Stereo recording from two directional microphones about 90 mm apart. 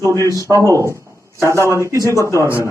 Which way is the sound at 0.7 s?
35° right (ahead or behind).